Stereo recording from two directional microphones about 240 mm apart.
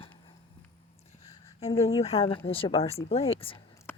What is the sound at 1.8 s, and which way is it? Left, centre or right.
Speech, left.